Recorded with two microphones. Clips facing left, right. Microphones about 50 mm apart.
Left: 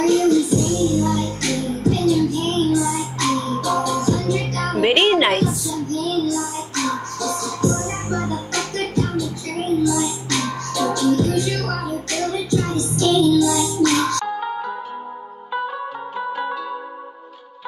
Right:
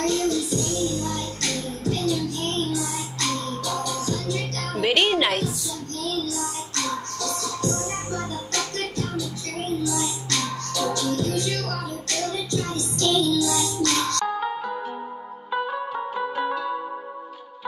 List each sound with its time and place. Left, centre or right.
0.0 s music: left
4.8 s a sound: left
5.9 s child singing: centre
6.3 s music: centre
10.3 s music: centre
16.2 s music: centre